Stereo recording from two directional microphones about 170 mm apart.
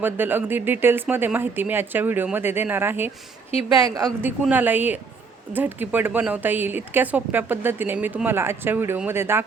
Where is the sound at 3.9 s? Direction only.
15° right (ahead or behind).